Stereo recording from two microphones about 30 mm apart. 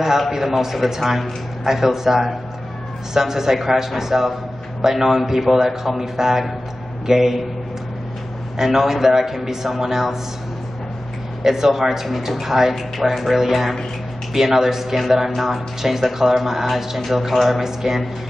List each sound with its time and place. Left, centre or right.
0.3 s speech: centre
8.5 s speech: centre
11.4 s speech: centre
17.6 s speech: centre